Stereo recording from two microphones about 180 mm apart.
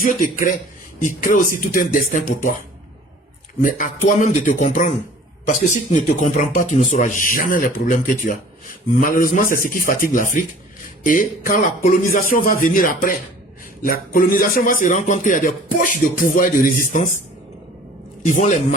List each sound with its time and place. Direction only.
0.0 s a man's voice: 50° left (ahead or behind)
3.6 s a man's voice: 45° left (ahead or behind)
6.1 s a man's voice: 45° left (ahead or behind)
18.3 s a man's voice: 45° left (ahead or behind)